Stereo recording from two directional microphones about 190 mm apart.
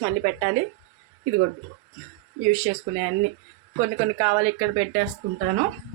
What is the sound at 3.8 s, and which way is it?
Speech, 35° right (ahead or behind).